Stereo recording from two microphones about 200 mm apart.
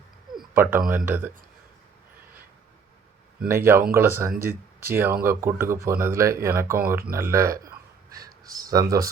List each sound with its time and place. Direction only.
0.3 s speech: 10° right (ahead or behind)
3.4 s speech: 10° right (ahead or behind)